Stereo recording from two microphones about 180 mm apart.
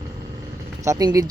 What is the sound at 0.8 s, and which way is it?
Speech, 20° right (ahead or behind).